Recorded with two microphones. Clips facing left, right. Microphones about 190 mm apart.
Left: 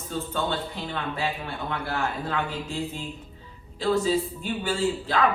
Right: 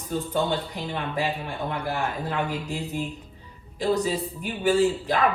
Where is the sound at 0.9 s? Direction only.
15° right (ahead or behind).